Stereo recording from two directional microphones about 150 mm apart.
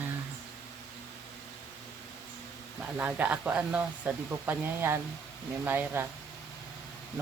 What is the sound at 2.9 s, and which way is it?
Speech, 10° right (ahead or behind).